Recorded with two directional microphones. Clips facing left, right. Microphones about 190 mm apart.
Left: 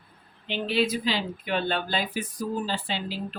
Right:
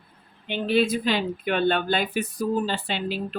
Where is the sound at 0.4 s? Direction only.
55° right (ahead or behind).